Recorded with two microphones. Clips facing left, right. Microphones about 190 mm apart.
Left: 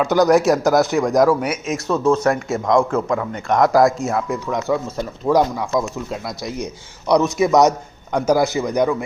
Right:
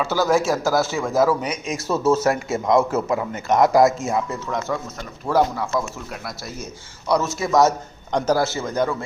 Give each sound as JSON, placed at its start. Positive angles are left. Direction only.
{"t": 0.0, "sound": "speech", "side_deg": 15}
{"t": 4.3, "sound": "speech", "side_deg": 15}